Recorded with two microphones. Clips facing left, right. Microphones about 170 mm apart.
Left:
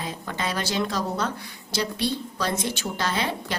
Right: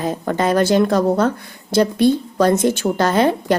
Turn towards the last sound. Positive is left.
turn(degrees=-50)  # may be behind; listen again after turning